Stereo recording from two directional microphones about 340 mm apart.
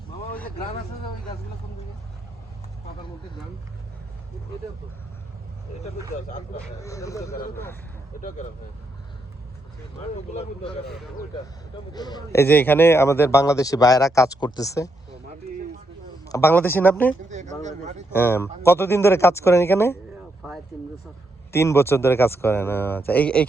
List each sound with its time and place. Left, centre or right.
6.7 s a man's voice: centre
10.3 s a man's voice: centre
11.9 s a man's voice: centre
16.2 s a man's voice: centre
17.2 s speech: right
18.1 s a man's voice: centre
21.5 s a man's voice: centre